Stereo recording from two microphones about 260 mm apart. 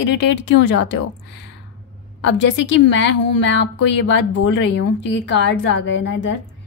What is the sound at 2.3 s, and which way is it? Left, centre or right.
A woman's voice, left.